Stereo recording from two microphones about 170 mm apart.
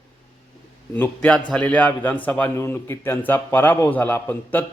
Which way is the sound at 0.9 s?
10° left (ahead or behind).